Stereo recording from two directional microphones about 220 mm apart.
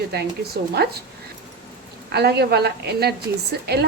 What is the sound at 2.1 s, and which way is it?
A woman's voice, 50° right (ahead or behind).